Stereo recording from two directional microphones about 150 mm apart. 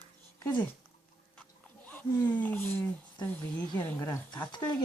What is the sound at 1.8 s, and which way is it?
Speech, 10° left (ahead or behind).